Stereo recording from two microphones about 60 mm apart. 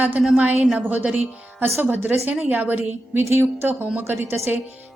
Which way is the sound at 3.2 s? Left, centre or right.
Right.